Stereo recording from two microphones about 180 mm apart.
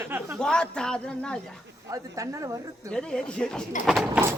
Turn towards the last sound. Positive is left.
turn(degrees=0)  # may be behind; listen again after turning